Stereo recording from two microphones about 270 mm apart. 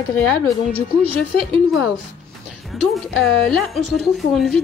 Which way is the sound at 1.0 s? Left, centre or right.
Right.